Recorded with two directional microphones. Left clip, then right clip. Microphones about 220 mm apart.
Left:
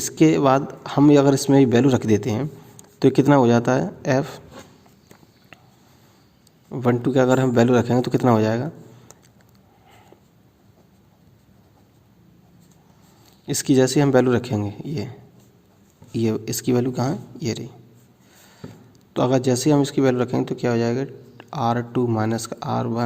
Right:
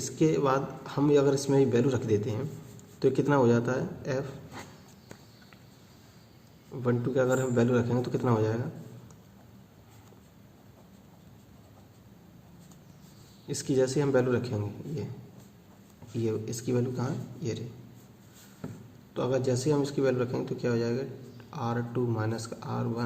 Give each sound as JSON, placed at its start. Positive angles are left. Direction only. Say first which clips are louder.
{"t": 0.0, "sound": "a man's voice", "louder": "left 9 dB", "side_deg": 45}
{"t": 6.7, "sound": "a man's voice", "louder": "left 9 dB", "side_deg": 50}
{"t": 13.5, "sound": "a man's voice", "louder": "left 9 dB", "side_deg": 50}
{"t": 16.1, "sound": "a man's voice", "louder": "left 8 dB", "side_deg": 50}
{"t": 19.1, "sound": "a man's voice", "louder": "left 9 dB", "side_deg": 50}